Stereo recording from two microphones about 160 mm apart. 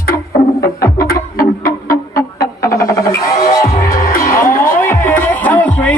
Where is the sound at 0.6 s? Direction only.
20° left (ahead or behind).